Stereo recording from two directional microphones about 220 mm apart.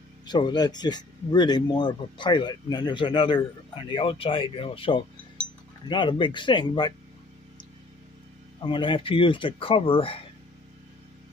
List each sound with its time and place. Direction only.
0.3 s speech: 20° left (ahead or behind)
8.6 s speech: 20° left (ahead or behind)